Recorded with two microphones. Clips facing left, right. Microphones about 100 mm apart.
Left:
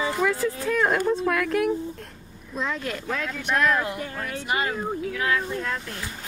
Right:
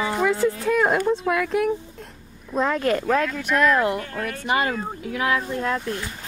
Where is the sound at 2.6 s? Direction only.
50° right (ahead or behind).